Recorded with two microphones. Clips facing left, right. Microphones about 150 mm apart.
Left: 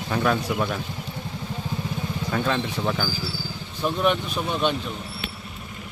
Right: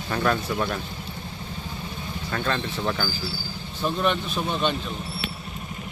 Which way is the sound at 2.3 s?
5° left (ahead or behind).